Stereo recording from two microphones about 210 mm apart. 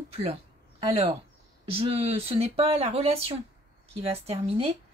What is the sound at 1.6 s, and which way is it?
A woman's voice, 25° right (ahead or behind).